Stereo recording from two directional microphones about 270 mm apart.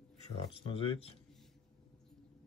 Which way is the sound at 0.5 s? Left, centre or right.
Centre.